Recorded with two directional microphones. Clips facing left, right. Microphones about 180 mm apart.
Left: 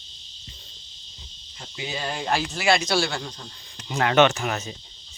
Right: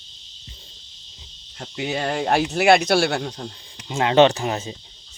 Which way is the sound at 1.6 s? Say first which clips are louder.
Right 7 dB; 60° right (ahead or behind).